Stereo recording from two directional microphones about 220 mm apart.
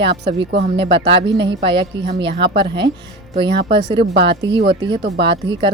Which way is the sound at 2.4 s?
25° right (ahead or behind).